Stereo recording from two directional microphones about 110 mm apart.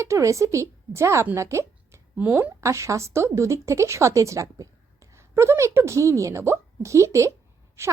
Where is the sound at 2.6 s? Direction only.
25° right (ahead or behind).